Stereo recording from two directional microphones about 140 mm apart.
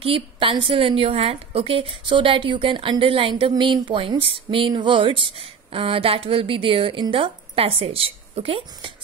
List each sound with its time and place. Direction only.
0.0 s a woman's voice: 40° right (ahead or behind)